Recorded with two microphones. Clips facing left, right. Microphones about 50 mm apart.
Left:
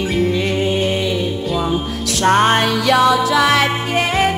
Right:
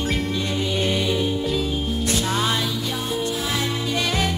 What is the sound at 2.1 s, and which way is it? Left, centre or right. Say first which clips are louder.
Music: left 12 dB; left.